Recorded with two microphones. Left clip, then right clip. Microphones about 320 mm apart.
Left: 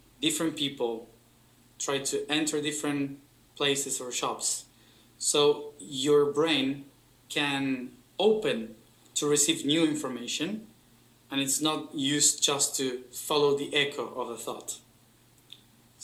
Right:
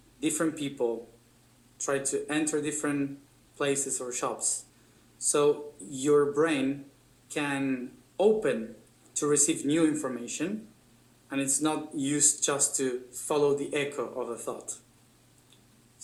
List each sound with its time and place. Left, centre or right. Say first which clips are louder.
0.2 s speech: left 1 dB; centre